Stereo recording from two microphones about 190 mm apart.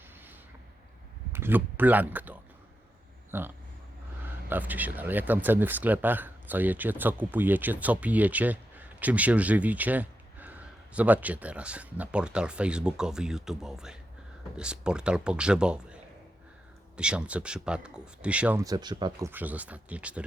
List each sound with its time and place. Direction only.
1.3 s speech: 10° right (ahead or behind)
17.0 s speech: 5° right (ahead or behind)
18.6 s speech: 20° right (ahead or behind)
19.3 s speech: 10° right (ahead or behind)